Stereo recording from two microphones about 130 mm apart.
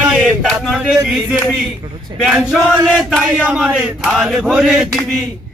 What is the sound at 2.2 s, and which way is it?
Male singing, 5° right (ahead or behind).